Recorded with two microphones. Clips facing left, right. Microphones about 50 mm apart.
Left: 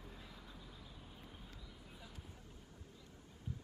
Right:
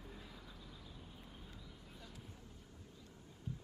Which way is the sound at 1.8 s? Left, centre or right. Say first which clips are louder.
Even; centre.